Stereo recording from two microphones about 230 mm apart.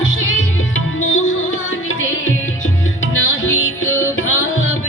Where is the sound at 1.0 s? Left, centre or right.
Left.